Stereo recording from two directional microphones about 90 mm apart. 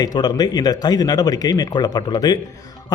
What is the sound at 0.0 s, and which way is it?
A man's voice, 50° left (ahead or behind).